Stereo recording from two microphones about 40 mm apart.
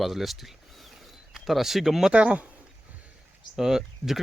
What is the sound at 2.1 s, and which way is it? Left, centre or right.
Speech, right.